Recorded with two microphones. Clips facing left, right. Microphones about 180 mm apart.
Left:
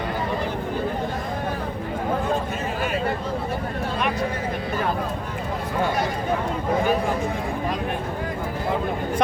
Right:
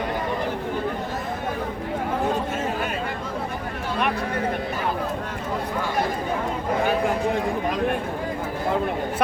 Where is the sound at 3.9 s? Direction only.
60° right (ahead or behind).